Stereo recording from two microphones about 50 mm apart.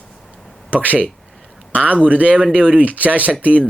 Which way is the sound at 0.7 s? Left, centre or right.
Right.